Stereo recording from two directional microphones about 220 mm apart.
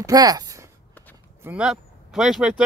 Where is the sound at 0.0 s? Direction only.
15° right (ahead or behind).